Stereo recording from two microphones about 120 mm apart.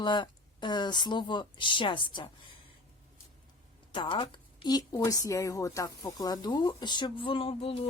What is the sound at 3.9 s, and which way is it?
Speech, 40° left (ahead or behind).